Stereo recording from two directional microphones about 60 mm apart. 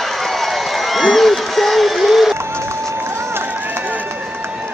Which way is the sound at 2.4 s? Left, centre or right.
Right.